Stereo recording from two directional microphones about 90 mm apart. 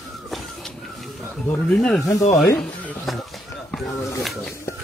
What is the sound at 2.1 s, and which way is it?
Speech, 35° left (ahead or behind).